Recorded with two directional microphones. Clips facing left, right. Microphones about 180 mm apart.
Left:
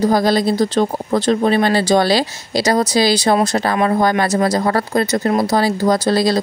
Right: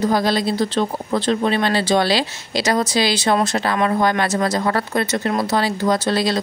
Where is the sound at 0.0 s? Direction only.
40° left (ahead or behind).